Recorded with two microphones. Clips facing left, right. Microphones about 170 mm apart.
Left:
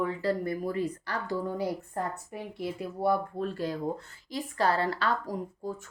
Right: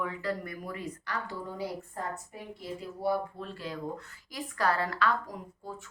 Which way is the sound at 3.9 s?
30° left (ahead or behind).